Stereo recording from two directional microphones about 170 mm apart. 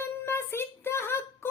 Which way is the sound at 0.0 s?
15° left (ahead or behind).